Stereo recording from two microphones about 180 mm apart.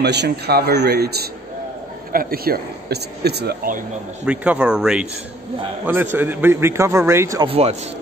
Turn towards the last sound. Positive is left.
turn(degrees=-35)  # may be behind; listen again after turning